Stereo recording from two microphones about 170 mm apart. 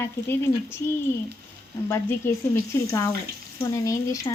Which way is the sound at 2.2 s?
15° left (ahead or behind).